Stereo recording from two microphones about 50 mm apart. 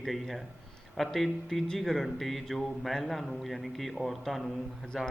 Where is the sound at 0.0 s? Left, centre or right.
Centre.